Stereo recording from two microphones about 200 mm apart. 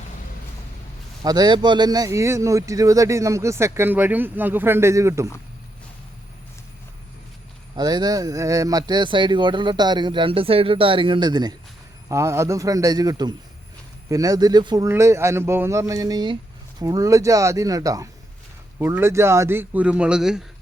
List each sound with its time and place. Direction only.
1.2 s speech: 20° right (ahead or behind)
7.8 s speech: 20° right (ahead or behind); by 20.4 s 5° right (ahead or behind)